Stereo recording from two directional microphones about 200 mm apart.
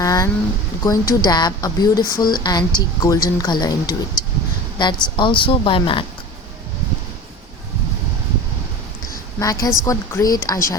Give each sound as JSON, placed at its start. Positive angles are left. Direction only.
{"t": 0.0, "sound": "a sound", "side_deg": 15}
{"t": 0.9, "sound": "speech", "side_deg": 20}
{"t": 9.4, "sound": "speech", "side_deg": 15}